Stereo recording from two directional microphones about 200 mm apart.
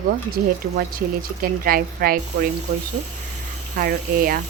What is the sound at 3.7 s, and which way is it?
Speech, 45° right (ahead or behind).